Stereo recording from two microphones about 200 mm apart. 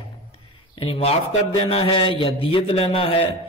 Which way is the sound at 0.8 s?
30° left (ahead or behind).